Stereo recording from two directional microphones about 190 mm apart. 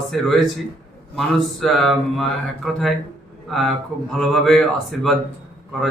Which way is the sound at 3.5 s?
5° left (ahead or behind).